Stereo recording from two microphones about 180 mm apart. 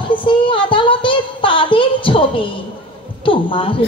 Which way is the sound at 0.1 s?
30° left (ahead or behind).